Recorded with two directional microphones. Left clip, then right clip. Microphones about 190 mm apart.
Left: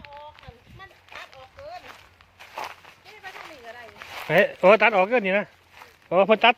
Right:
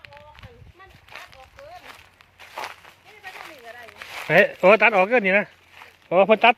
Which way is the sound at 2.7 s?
5° right (ahead or behind).